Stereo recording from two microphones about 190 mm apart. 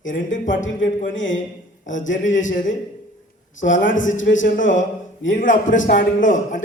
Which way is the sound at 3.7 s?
80° left.